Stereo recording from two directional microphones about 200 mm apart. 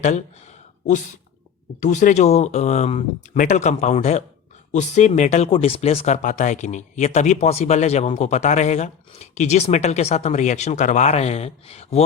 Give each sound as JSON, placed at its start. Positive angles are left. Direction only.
{"t": 1.8, "sound": "speech", "side_deg": 40}